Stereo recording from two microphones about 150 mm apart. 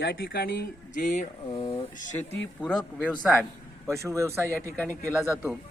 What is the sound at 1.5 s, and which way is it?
Speech, 35° left (ahead or behind).